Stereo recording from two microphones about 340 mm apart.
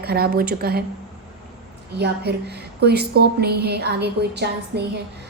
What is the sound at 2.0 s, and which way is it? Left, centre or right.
A woman's voice, right.